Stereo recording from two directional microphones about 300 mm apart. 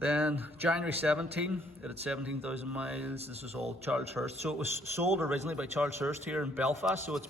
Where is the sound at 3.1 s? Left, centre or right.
Right.